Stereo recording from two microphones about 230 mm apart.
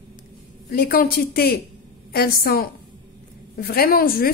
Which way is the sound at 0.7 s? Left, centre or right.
Left.